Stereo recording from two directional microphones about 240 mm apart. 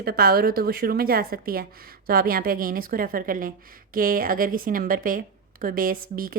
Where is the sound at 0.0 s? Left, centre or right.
Right.